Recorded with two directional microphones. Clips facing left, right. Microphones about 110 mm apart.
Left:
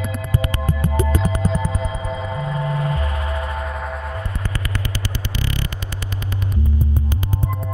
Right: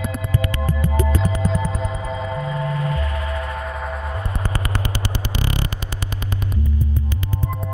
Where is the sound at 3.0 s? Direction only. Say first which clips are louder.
Even; 30° left (ahead or behind).